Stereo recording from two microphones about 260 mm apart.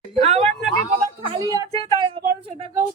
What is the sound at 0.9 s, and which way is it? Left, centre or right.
A woman's voice, centre.